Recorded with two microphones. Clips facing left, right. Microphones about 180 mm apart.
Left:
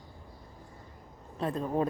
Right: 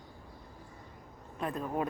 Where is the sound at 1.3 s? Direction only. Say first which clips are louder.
Left 3 dB; 30° left (ahead or behind).